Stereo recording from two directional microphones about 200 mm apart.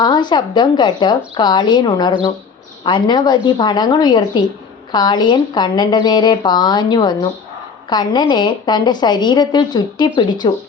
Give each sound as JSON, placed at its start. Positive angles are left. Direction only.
{"t": 0.0, "sound": "speech", "side_deg": 20}